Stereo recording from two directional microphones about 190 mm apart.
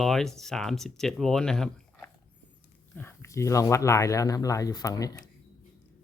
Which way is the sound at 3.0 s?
15° left (ahead or behind).